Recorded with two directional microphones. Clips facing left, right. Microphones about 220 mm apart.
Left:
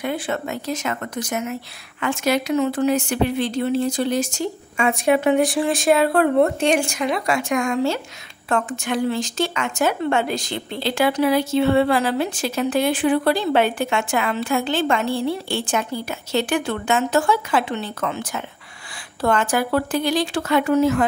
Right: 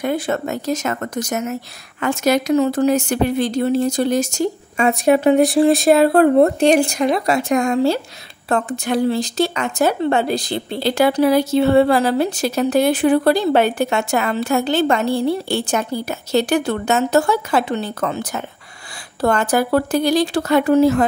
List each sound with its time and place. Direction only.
0.0 s speech: 40° right (ahead or behind)